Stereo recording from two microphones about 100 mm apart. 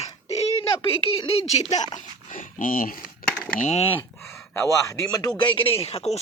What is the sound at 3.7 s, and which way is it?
Speech, 75° left (ahead or behind).